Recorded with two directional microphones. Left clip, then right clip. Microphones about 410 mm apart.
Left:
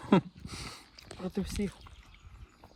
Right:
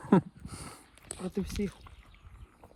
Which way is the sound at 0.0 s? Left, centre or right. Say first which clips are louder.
Even; centre.